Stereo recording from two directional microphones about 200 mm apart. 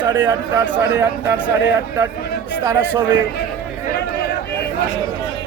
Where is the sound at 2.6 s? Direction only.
10° right (ahead or behind).